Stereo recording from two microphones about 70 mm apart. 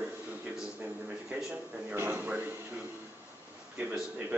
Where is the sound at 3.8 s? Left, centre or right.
Right.